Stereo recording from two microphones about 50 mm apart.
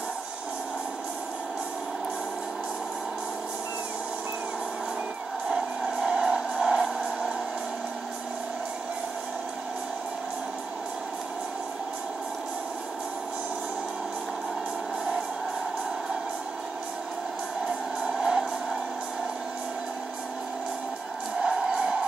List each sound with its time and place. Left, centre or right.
5.9 s music: right
18.0 s music: centre
21.4 s a sound: centre